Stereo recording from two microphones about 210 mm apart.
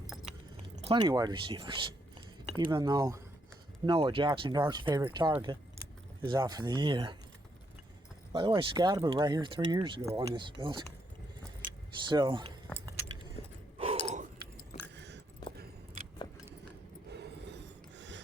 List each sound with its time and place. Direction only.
0.8 s speech: 25° right (ahead or behind)
8.3 s speech: 25° right (ahead or behind)
12.0 s speech: 20° right (ahead or behind)
13.4 s gasp: 30° left (ahead or behind)
13.7 s sigh: 30° right (ahead or behind)
14.9 s a sound: 55° right (ahead or behind)
17.1 s a sound: 55° right (ahead or behind)